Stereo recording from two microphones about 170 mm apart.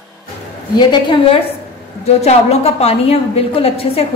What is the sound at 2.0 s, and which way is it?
A woman's voice, 40° left (ahead or behind).